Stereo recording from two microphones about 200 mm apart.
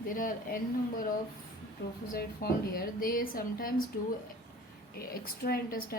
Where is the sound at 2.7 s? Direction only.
45° left (ahead or behind).